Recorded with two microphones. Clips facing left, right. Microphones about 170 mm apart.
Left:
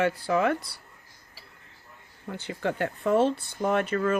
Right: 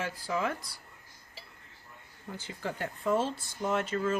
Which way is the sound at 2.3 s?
65° left (ahead or behind).